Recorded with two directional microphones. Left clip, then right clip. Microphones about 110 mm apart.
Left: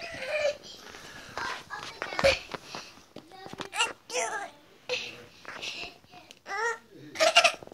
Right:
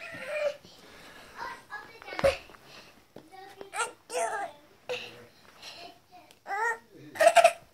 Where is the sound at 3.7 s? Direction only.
20° right (ahead or behind).